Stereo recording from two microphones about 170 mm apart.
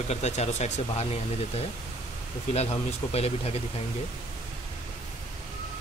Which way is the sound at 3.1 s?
35° left (ahead or behind).